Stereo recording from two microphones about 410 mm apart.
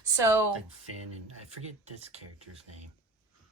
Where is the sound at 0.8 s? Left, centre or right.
Right.